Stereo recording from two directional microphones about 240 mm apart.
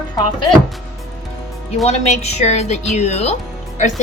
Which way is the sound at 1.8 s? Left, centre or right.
Left.